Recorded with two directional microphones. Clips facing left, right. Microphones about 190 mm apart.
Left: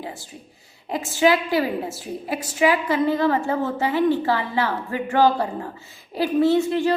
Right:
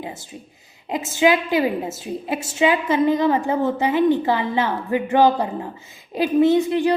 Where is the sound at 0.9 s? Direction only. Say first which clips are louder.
Right 1 dB; 20° right (ahead or behind).